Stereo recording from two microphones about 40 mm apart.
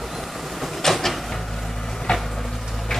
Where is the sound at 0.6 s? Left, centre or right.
Centre.